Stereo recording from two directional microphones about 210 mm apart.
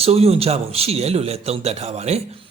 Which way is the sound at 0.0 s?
30° right (ahead or behind).